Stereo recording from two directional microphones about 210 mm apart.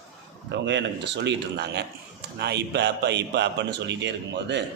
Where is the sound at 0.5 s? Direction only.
55° right (ahead or behind).